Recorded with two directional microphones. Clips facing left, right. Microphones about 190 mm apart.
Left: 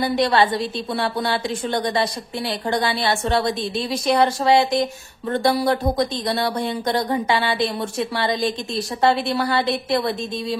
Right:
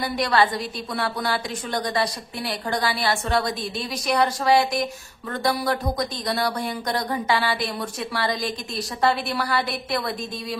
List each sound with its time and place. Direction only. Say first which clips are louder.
0.0 s speech: left 3 dB; 25° left (ahead or behind)